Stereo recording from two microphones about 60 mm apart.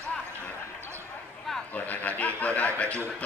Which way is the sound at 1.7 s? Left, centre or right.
Left.